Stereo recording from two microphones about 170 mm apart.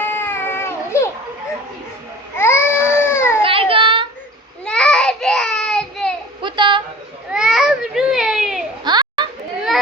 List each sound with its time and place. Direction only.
0.0 s baby cry: 15° left (ahead or behind)
2.3 s baby cry: 15° left (ahead or behind)
3.4 s a sound: 30° right (ahead or behind)
4.6 s child singing: 5° left (ahead or behind)
6.4 s a sound: 30° right (ahead or behind)
7.3 s baby cry: 5° right (ahead or behind)
8.8 s children playing: 25° right (ahead or behind)